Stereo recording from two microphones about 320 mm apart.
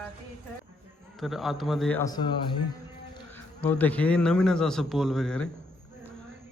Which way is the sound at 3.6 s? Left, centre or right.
Centre.